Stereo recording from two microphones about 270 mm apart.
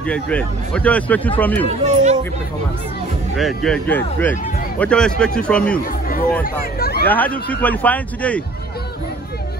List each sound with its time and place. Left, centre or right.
0.0 s a man's voice: centre
1.7 s speech: right
3.3 s a man's voice: centre
5.8 s speech: left
7.1 s a man's voice: centre